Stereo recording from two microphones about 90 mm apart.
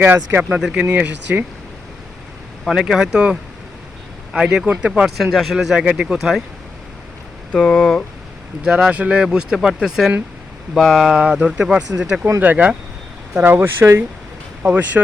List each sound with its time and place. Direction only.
0.0 s speech: 25° right (ahead or behind)
0.6 s speech: 10° right (ahead or behind)
2.6 s speech: 5° right (ahead or behind)
7.5 s speech: 10° left (ahead or behind)
8.6 s speech: 10° right (ahead or behind)
12.4 s speech: 20° right (ahead or behind)
14.6 s speech: 15° right (ahead or behind)